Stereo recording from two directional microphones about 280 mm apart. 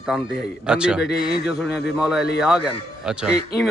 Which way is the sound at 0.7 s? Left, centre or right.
Centre.